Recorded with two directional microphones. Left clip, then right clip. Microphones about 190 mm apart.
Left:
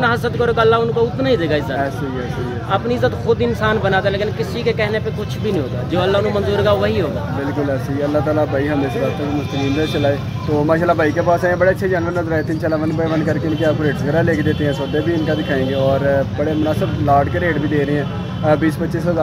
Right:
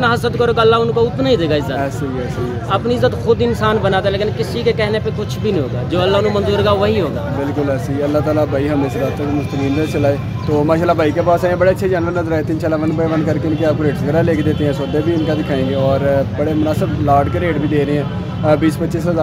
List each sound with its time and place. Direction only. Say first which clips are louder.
0.0 s speech: right 2 dB; 20° right (ahead or behind)
2.7 s speech: right 2 dB; 15° right (ahead or behind)
8.4 s speech: right 1 dB; centre (ahead or behind)
10.7 s speech: even; centre (ahead or behind)